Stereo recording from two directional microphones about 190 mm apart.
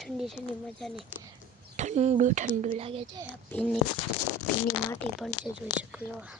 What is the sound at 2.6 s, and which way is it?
Speech, 30° right (ahead or behind).